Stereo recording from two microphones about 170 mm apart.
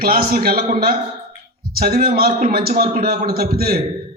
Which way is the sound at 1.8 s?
60° right (ahead or behind).